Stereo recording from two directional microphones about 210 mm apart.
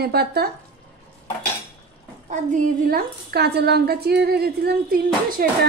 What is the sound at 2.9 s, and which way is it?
A woman's voice, 50° right (ahead or behind).